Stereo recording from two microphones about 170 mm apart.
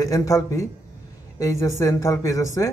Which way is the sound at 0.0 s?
20° left (ahead or behind).